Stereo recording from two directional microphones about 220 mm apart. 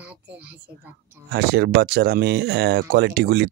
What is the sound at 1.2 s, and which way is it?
Speech, 50° right (ahead or behind).